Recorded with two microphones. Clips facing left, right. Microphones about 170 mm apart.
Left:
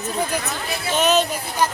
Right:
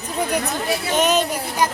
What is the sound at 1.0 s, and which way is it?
Speech, 10° right (ahead or behind).